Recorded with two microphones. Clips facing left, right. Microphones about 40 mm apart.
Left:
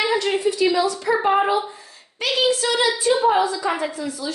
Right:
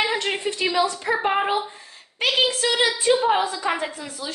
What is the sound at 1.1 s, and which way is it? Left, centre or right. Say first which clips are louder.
Speech: left 4 dB; centre.